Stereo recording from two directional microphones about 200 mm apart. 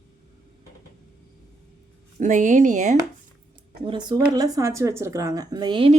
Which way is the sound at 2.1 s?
40° right (ahead or behind).